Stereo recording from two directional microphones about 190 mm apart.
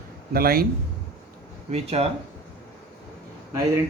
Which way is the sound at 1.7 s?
35° right (ahead or behind).